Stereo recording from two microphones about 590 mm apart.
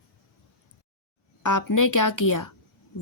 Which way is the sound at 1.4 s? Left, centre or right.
Left.